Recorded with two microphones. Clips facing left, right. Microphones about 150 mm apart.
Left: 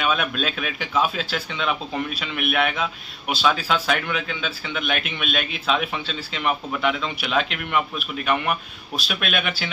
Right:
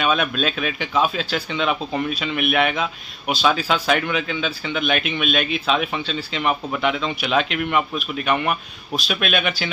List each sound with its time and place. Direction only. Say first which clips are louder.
0.0 s speech: right 3 dB; 5° left (ahead or behind)